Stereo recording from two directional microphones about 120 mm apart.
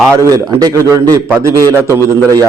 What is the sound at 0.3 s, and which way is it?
A man's voice, 30° right (ahead or behind).